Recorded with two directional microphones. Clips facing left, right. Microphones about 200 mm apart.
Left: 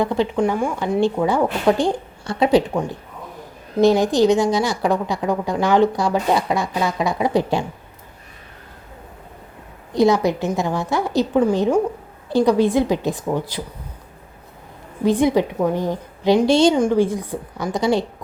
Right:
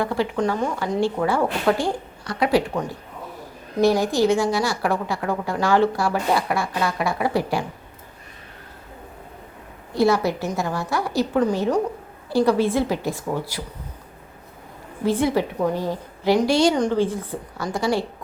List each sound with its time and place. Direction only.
0.0 s a woman's voice: 20° left (ahead or behind)
9.9 s a woman's voice: 20° left (ahead or behind)
15.0 s a woman's voice: 15° left (ahead or behind)
16.7 s a woman's voice: 10° left (ahead or behind)